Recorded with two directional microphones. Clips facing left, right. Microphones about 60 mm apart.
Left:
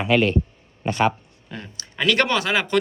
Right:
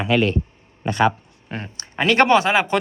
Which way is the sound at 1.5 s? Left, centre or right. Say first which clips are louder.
Right 5 dB; right.